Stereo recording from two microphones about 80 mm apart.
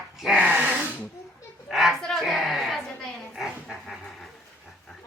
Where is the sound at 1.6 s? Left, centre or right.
Centre.